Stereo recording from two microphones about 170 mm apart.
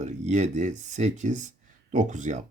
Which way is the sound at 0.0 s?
45° right (ahead or behind).